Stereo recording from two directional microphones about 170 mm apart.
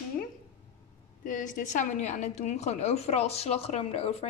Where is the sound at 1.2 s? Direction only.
50° left (ahead or behind).